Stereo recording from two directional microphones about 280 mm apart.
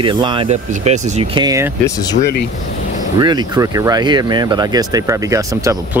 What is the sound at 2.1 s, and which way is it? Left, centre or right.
Speech, left.